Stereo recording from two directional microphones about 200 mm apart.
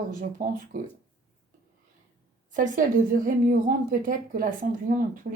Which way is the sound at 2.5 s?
40° right (ahead or behind).